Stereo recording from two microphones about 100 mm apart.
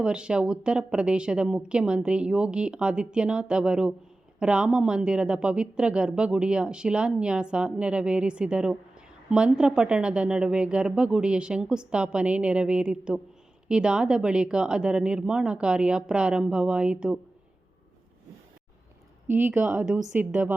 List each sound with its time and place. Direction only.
0.0 s speech: 10° right (ahead or behind)
19.3 s speech: 20° right (ahead or behind)